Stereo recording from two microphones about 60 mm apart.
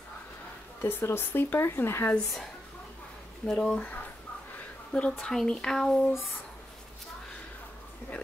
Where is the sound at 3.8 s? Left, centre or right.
Left.